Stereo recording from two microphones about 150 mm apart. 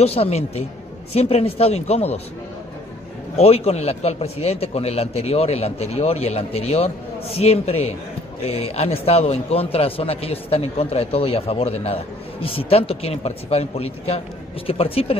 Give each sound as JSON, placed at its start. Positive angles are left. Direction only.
{"t": 0.0, "sound": "a man's voice", "side_deg": 40}
{"t": 3.3, "sound": "a man's voice", "side_deg": 45}